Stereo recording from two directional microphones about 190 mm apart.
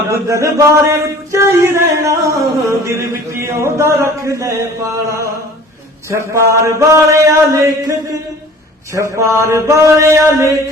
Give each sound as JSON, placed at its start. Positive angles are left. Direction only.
{"t": 0.1, "sound": "chant", "side_deg": -15}